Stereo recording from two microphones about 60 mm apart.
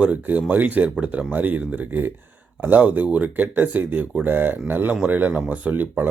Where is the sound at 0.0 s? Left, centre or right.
Right.